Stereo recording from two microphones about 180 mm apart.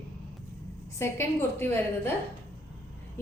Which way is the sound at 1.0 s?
15° left (ahead or behind).